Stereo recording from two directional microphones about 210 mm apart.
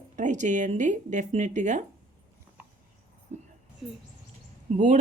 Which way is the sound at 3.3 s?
35° right (ahead or behind).